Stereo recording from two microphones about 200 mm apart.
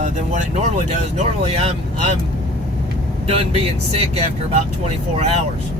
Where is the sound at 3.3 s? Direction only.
30° right (ahead or behind).